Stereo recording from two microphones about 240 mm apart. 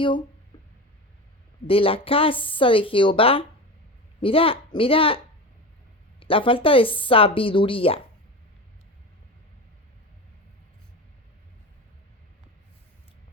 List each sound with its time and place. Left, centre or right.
1.6 s speech: left